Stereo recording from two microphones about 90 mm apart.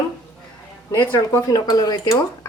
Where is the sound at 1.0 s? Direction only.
40° left (ahead or behind).